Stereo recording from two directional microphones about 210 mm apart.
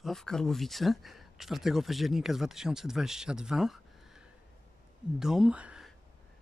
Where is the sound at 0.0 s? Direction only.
Centre (ahead or behind).